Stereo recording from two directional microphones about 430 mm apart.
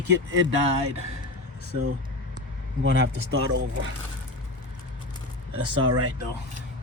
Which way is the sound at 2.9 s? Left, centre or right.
Right.